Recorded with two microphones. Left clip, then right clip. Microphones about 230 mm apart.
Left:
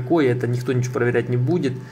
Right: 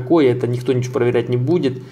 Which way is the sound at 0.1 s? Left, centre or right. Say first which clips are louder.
Right 4 dB; centre.